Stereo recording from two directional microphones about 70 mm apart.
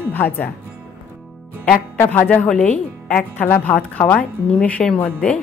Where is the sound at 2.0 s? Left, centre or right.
Left.